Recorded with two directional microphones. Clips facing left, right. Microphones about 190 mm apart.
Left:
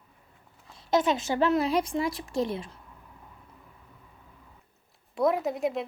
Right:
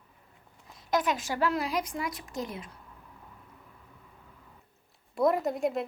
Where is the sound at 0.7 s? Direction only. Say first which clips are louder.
Left 4 dB; 25° left (ahead or behind).